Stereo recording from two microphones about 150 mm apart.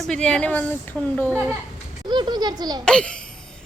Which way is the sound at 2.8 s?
5° left (ahead or behind).